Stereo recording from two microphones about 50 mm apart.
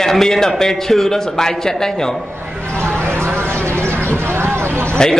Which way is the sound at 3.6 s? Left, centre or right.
Right.